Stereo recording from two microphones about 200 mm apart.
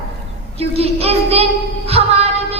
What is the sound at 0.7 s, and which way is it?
Child singing, 30° right (ahead or behind).